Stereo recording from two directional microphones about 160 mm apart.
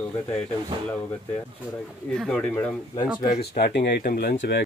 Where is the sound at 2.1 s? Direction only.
5° left (ahead or behind).